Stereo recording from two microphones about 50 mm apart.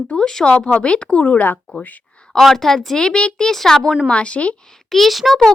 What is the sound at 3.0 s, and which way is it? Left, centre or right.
Speech, left.